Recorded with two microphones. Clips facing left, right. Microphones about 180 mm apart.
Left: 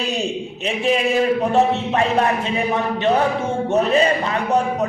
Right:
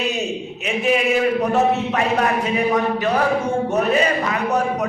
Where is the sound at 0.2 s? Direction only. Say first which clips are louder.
Left 1 dB; 30° left (ahead or behind).